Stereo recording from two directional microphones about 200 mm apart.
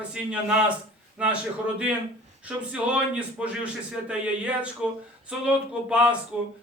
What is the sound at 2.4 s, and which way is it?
Speech, 5° right (ahead or behind).